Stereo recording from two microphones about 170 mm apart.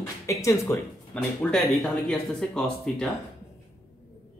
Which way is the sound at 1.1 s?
5° left (ahead or behind).